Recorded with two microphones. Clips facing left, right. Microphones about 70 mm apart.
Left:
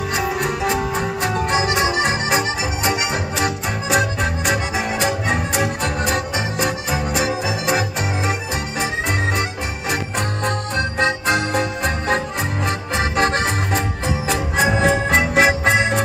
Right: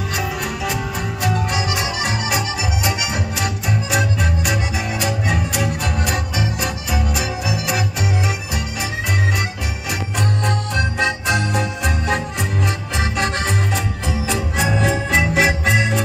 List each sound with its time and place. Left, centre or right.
0.1 s music: left
9.4 s organ: left